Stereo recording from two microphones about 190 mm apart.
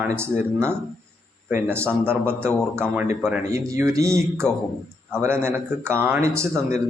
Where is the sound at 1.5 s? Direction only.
10° right (ahead or behind).